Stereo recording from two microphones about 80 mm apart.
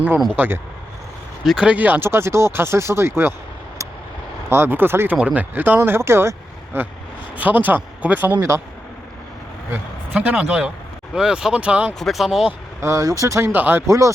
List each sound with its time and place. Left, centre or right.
0.3 s speech: right
1.5 s speech: centre; by 3.3 s right
4.4 s speech: right
5.1 s speech: centre
9.7 s speech: centre
11.9 s speech: centre
12.8 s speech: right
13.5 s speech: right
13.8 s speech: right